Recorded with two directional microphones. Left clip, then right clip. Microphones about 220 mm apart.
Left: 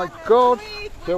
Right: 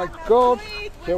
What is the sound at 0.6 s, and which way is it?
Speech, 20° right (ahead or behind).